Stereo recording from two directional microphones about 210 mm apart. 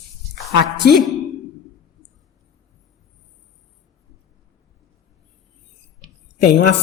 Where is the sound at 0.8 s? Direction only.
50° left (ahead or behind).